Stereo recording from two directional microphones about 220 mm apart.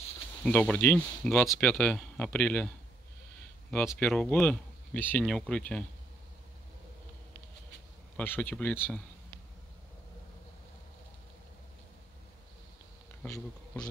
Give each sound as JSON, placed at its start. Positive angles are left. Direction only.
{"t": 0.4, "sound": "speech", "side_deg": 5}
{"t": 3.7, "sound": "speech", "side_deg": 5}
{"t": 8.2, "sound": "speech", "side_deg": 10}
{"t": 13.2, "sound": "speech", "side_deg": 5}